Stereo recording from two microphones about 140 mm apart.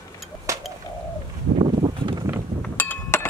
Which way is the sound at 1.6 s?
35° right (ahead or behind).